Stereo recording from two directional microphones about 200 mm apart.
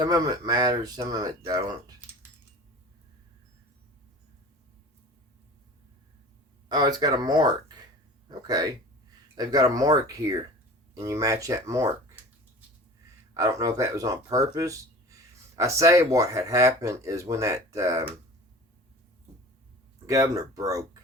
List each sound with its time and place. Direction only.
0.0 s speech: 20° right (ahead or behind)
6.7 s speech: 20° right (ahead or behind)
13.3 s speech: 15° right (ahead or behind)
20.1 s speech: 15° right (ahead or behind)